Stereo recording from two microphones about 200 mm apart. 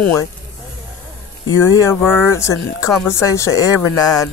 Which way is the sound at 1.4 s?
15° left (ahead or behind).